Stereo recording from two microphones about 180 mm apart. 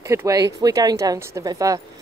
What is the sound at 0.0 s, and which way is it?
Speech, 15° right (ahead or behind).